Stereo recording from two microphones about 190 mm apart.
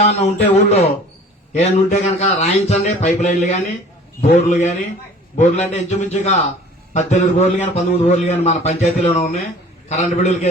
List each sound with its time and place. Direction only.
0.0 s a man's voice: 35° left (ahead or behind)